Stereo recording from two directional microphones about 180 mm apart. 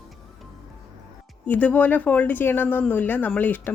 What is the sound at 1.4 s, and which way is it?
Speech, 10° left (ahead or behind).